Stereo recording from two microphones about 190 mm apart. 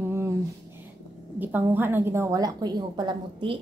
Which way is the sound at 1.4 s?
10° right (ahead or behind).